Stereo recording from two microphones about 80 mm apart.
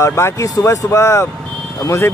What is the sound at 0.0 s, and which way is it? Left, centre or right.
Speech, left.